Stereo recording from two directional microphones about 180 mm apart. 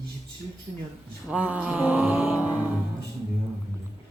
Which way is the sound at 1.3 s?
5° right (ahead or behind).